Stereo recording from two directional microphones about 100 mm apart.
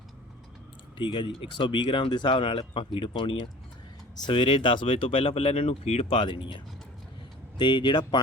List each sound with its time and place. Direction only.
0.9 s speech: 55° left (ahead or behind)
7.6 s speech: 50° left (ahead or behind)